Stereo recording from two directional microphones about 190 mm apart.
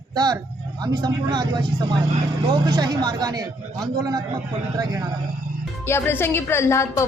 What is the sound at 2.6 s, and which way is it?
Speech, 20° right (ahead or behind).